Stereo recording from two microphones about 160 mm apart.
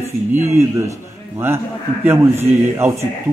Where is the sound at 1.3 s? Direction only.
15° right (ahead or behind).